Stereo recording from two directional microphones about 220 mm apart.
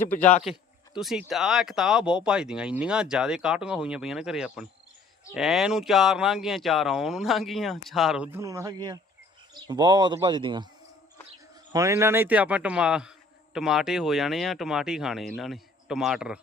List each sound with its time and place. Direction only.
0.0 s a man's voice: 10° left (ahead or behind); by 10.7 s 20° right (ahead or behind)
11.7 s a man's voice: 15° right (ahead or behind)